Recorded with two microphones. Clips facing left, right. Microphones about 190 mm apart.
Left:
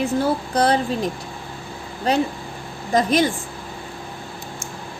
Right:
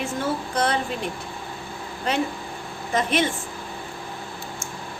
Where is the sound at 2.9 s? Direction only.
35° left (ahead or behind).